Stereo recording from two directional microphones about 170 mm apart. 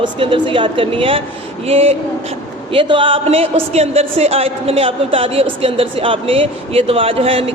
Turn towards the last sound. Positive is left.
turn(degrees=-35)  # may be behind; listen again after turning